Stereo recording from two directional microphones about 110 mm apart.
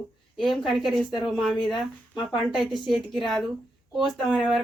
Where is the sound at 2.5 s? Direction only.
Centre (ahead or behind).